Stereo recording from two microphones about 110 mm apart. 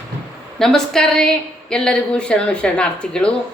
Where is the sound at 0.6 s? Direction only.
5° left (ahead or behind).